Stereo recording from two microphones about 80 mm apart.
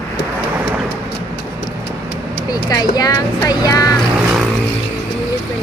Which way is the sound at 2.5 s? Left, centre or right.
Left.